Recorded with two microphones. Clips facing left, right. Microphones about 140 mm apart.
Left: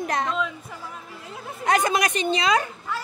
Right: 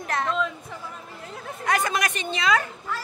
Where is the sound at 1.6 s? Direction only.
20° left (ahead or behind).